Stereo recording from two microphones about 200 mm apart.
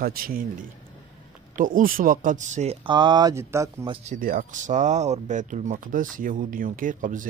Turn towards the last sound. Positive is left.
turn(degrees=-40)  # may be behind; listen again after turning